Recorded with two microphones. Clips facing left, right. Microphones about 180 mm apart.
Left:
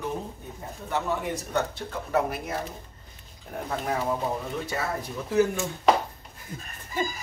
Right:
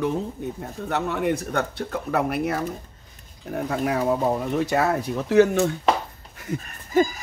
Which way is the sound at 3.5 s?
75° right (ahead or behind).